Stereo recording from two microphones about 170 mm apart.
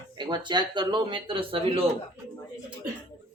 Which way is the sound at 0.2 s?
25° right (ahead or behind).